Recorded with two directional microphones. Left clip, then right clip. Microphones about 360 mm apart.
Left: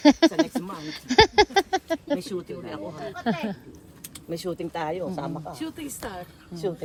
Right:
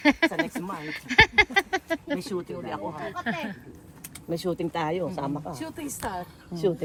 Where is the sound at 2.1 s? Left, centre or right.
Centre.